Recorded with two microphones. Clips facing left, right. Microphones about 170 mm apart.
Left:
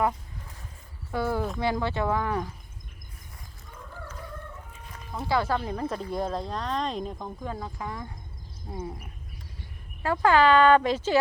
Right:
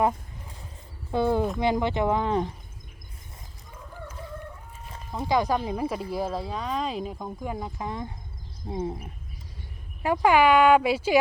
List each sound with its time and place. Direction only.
1.1 s speech: 20° right (ahead or behind)
5.3 s speech: 15° right (ahead or behind)
10.0 s speech: 15° right (ahead or behind)